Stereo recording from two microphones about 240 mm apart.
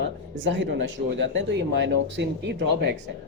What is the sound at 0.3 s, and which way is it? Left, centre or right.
Speech, right.